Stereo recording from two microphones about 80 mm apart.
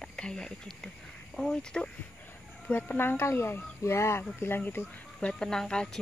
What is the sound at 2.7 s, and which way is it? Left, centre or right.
Speech, left.